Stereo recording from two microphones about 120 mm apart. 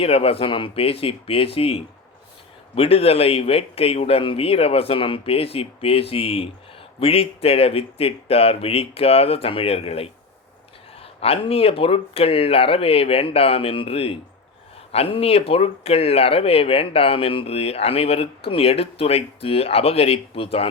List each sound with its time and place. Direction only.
0.0 s speech: 55° left (ahead or behind)